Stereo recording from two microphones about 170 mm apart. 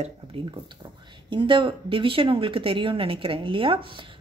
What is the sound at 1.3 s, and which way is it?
Speech, 30° right (ahead or behind).